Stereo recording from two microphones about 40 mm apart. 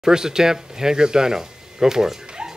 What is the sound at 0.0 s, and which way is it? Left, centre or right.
Speech, centre.